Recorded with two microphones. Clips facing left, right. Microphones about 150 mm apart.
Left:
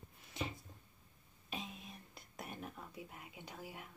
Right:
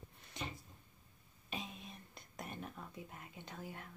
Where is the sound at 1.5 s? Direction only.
Centre (ahead or behind).